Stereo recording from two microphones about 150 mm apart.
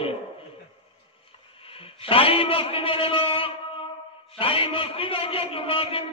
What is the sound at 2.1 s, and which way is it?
A man's voice, 40° left (ahead or behind).